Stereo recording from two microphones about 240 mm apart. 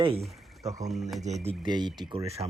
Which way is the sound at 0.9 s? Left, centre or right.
Centre.